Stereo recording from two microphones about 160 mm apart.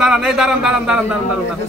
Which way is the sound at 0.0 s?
5° right (ahead or behind).